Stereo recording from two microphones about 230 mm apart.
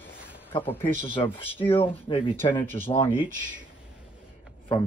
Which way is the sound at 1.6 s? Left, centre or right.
Left.